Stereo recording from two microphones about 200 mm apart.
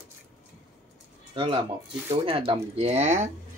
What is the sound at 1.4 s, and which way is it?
Speech, 25° right (ahead or behind).